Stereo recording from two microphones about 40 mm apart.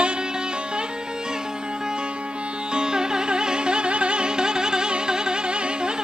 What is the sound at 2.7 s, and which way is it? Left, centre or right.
Music, centre.